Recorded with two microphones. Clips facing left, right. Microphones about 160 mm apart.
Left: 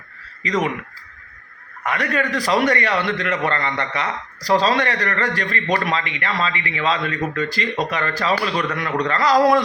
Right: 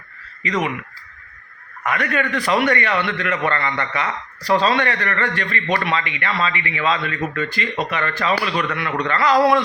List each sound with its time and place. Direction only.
0.4 s a man's voice: 35° left (ahead or behind)
1.8 s a man's voice: 35° left (ahead or behind)